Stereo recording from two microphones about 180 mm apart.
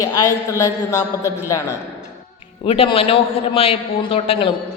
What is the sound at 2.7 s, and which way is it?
A woman's voice, 30° left (ahead or behind).